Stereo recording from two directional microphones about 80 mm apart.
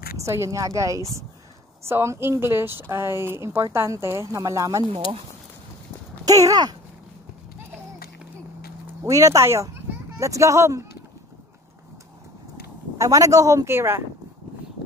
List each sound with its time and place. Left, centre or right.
0.2 s speech: right
1.9 s a woman's voice: right
6.2 s speech: right
9.0 s speech: right
12.9 s speech: right
13.7 s speech: right